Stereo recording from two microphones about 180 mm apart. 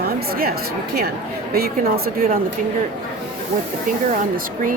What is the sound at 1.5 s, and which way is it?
Speech, 60° right (ahead or behind).